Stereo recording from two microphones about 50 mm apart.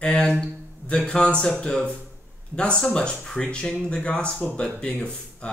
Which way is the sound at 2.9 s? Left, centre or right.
Centre.